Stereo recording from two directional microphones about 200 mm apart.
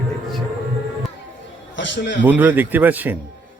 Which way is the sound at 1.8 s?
65° left (ahead or behind).